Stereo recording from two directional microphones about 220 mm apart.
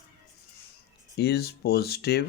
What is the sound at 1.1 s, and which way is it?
Speech, 45° left (ahead or behind).